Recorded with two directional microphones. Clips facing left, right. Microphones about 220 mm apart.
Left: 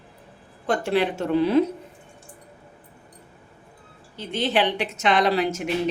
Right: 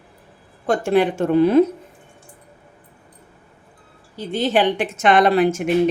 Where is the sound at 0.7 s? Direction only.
50° right (ahead or behind).